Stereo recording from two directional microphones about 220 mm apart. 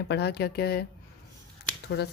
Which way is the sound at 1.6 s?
45° left (ahead or behind).